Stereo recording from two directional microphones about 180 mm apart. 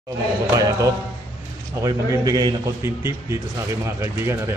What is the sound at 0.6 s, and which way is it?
A man's voice, 20° right (ahead or behind).